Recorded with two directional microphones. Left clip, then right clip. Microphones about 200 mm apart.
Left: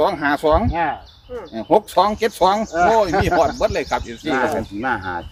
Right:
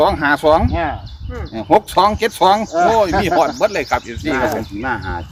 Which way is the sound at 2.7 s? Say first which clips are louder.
Right 2 dB; 60° right (ahead or behind).